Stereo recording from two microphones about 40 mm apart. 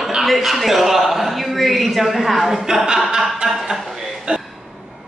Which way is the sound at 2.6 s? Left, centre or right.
Centre.